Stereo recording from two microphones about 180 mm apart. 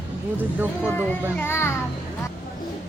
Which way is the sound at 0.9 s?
10° left (ahead or behind).